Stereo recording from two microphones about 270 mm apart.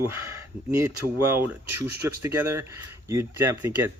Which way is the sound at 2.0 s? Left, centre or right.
Centre.